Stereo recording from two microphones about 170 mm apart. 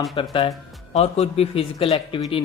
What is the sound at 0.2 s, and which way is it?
Speech, 30° left (ahead or behind).